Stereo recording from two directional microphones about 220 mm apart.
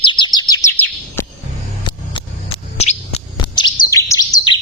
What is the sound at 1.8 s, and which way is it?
Bird, 25° left (ahead or behind).